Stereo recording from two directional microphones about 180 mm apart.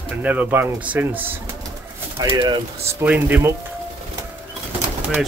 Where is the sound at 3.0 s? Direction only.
10° right (ahead or behind).